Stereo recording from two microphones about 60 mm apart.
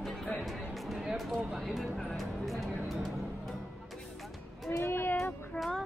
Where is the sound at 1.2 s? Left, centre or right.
Centre.